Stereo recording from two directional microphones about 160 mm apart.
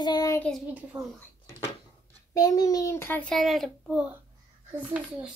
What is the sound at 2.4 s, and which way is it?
A child's voice, 20° left (ahead or behind).